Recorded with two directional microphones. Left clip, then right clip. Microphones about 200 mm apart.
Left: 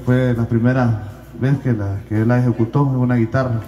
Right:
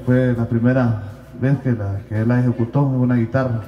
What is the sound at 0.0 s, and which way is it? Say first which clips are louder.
A man's voice: even; 35° left (ahead or behind).